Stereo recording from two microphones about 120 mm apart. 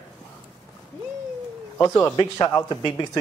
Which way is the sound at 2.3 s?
30° left (ahead or behind).